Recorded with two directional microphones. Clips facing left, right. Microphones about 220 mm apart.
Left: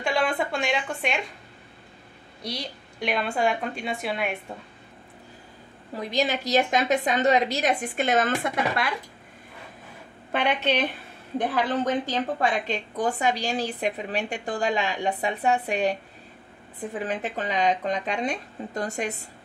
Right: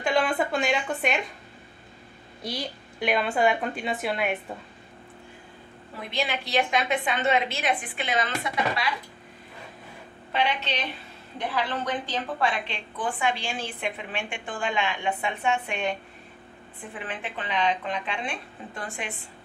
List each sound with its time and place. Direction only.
0.0 s a woman's voice: centre (ahead or behind)
2.4 s a woman's voice: centre (ahead or behind)
5.9 s a woman's voice: 40° left (ahead or behind)
10.3 s a woman's voice: 55° left (ahead or behind)